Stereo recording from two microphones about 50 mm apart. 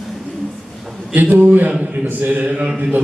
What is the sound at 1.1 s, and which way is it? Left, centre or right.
A man's voice, right.